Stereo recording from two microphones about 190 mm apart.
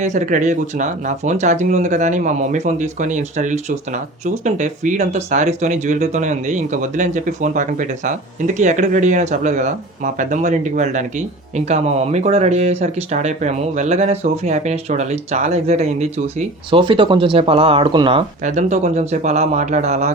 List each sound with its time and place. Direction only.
0.0 s speech: 40° right (ahead or behind)
18.4 s speech: 40° right (ahead or behind)